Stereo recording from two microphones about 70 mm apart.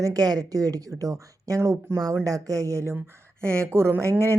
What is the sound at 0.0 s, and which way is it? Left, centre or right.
A woman's voice, right.